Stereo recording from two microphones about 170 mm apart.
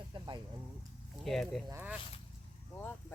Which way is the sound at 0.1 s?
30° right (ahead or behind).